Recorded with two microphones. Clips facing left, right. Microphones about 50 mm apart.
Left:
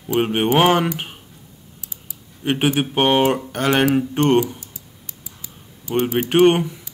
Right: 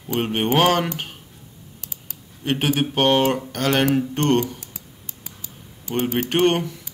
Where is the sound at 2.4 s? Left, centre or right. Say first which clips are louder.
Left 2 dB; centre.